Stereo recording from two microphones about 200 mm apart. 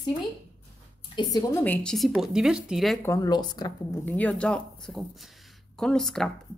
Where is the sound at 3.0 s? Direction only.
15° left (ahead or behind).